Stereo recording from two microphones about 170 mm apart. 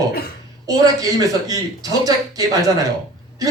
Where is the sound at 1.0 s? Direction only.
20° right (ahead or behind).